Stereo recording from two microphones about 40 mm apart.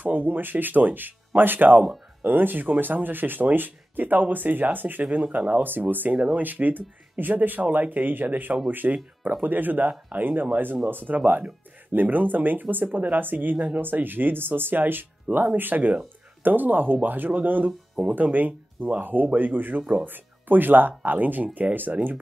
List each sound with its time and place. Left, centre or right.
0.0 s speech: right
5.0 s speech: right
5.6 s speech: right